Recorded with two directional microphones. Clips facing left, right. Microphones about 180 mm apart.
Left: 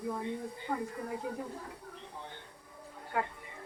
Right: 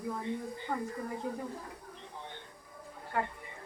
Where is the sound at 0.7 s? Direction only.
10° left (ahead or behind).